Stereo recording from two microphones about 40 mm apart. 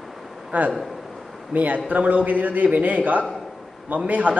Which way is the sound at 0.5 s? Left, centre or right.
Right.